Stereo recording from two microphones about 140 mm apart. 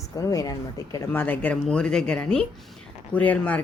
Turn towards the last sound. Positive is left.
turn(degrees=10)  # may be behind; listen again after turning